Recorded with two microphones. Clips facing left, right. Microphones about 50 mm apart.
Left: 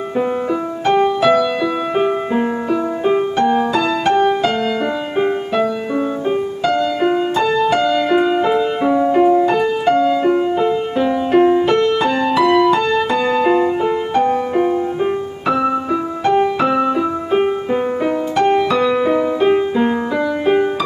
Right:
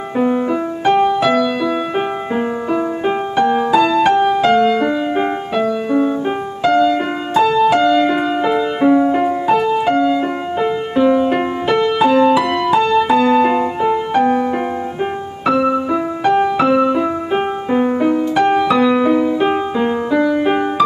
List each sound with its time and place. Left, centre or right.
0.2 s music: centre
2.7 s music: centre
6.6 s music: centre